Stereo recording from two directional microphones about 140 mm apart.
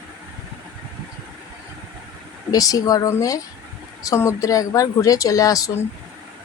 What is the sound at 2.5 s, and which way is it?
Speech, 25° left (ahead or behind).